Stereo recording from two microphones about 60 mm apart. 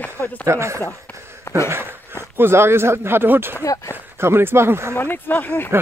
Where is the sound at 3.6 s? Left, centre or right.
Left.